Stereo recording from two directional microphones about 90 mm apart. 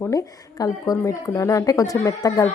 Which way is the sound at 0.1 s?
40° left (ahead or behind).